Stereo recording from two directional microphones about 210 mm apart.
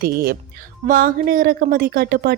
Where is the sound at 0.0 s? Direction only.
45° right (ahead or behind).